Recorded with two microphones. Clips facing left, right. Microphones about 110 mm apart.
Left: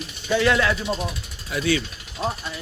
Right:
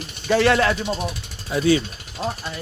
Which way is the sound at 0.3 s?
55° right (ahead or behind).